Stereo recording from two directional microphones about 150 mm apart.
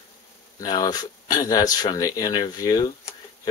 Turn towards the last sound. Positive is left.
turn(degrees=25)  # may be behind; listen again after turning